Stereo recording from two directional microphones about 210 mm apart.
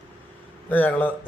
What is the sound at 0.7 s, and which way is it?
Speech, 10° left (ahead or behind).